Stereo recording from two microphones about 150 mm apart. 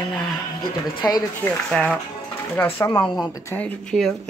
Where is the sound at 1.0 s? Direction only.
25° left (ahead or behind).